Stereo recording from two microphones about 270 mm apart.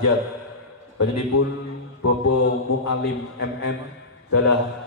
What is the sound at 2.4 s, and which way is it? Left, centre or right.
A man's voice, left.